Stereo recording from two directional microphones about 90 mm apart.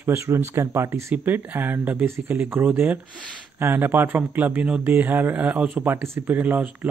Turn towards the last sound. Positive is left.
turn(degrees=-15)  # may be behind; listen again after turning